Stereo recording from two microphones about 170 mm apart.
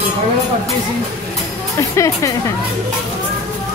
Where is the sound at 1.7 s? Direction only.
20° left (ahead or behind).